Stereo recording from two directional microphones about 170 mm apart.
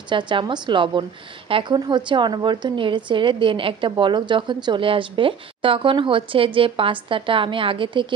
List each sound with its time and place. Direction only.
0.1 s a woman's voice: 30° right (ahead or behind)